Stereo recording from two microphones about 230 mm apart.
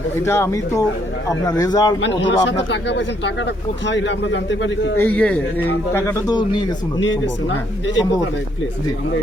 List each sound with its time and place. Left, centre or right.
0.3 s speech: centre
2.0 s speech: left
4.9 s speech: centre